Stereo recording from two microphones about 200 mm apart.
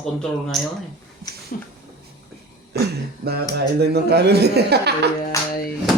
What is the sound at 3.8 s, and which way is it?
Speech, 55° right (ahead or behind).